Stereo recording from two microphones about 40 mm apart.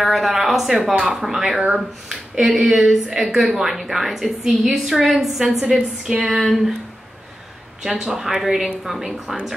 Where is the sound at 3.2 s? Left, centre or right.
Centre.